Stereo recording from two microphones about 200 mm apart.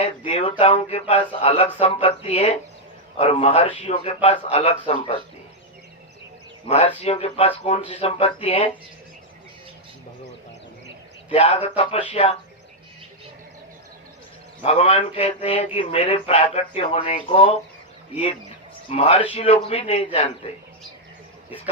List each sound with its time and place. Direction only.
0.0 s speech: 30° left (ahead or behind)
6.7 s speech: 30° left (ahead or behind)
11.3 s speech: 30° left (ahead or behind)
14.6 s speech: 30° left (ahead or behind)